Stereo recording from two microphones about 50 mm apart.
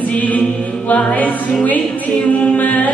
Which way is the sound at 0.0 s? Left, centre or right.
Left.